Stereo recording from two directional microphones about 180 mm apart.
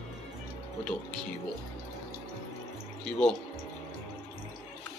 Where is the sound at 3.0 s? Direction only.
5° left (ahead or behind).